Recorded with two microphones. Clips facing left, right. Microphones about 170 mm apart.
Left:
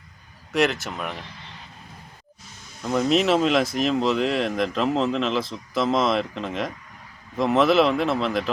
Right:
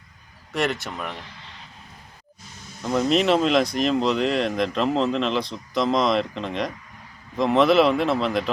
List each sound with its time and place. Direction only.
0.5 s speech: centre (ahead or behind)
2.8 s speech: centre (ahead or behind)